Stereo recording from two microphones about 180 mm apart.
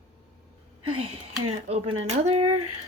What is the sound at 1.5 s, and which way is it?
Speech, 35° right (ahead or behind).